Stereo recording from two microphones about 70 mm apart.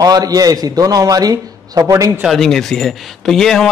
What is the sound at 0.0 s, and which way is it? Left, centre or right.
A man's voice, right.